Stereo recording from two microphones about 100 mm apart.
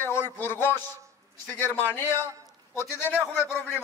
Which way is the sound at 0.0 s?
25° left (ahead or behind).